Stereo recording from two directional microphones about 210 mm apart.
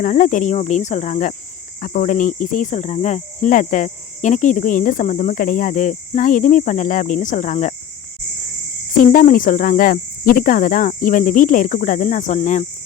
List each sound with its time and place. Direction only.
0.0 s cricket: 35° left (ahead or behind)
9.0 s cricket: 40° left (ahead or behind)